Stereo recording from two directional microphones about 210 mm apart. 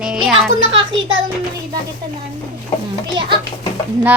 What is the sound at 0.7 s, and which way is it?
Speech, 65° right (ahead or behind).